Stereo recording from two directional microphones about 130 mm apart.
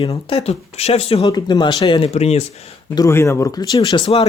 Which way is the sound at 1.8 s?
45° left (ahead or behind).